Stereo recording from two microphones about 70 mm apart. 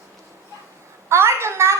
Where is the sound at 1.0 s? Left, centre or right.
Right.